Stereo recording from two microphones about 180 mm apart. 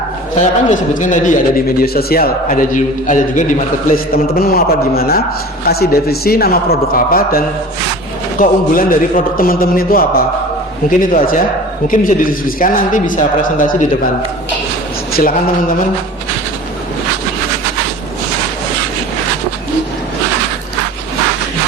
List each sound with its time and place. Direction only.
0.7 s a man's voice: 45° left (ahead or behind)
15.2 s a man's voice: 50° left (ahead or behind)